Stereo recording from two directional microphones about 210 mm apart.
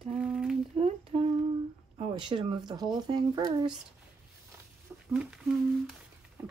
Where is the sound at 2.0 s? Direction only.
25° right (ahead or behind).